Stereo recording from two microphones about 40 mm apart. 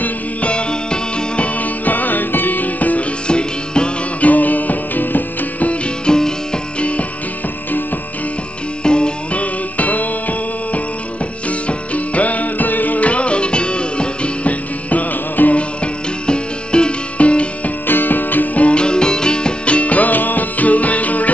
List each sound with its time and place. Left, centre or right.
0.0 s music: left
1.6 s music: left
3.3 s music: left
4.2 s music: left
5.7 s music: left
6.8 s music: left
8.8 s music: left
15.5 s music: left
17.8 s music: left
18.8 s music: left